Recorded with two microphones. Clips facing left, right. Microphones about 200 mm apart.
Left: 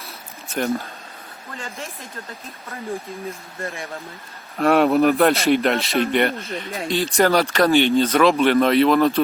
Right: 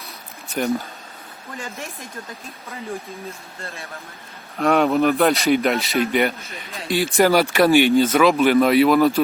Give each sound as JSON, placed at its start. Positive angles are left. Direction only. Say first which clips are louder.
{"t": 0.5, "sound": "a man's voice", "louder": "right 1 dB", "side_deg": 0}
{"t": 3.6, "sound": "speech", "louder": "left 6 dB", "side_deg": 15}
{"t": 4.5, "sound": "a man's voice", "louder": "left 1 dB", "side_deg": 0}
{"t": 7.4, "sound": "a man's voice", "louder": "right 2 dB", "side_deg": -15}